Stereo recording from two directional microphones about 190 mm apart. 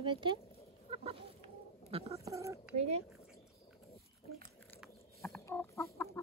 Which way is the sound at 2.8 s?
35° right (ahead or behind).